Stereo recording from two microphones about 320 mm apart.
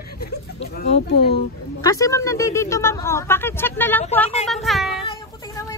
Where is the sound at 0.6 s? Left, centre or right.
Left.